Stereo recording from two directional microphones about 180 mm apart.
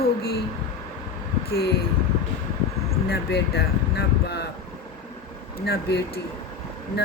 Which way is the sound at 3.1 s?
65° left (ahead or behind).